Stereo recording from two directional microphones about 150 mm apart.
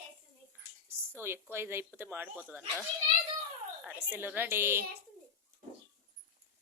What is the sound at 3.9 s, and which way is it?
Speech, 15° right (ahead or behind).